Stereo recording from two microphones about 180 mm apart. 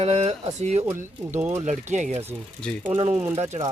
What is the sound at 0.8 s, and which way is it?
Speech, 10° right (ahead or behind).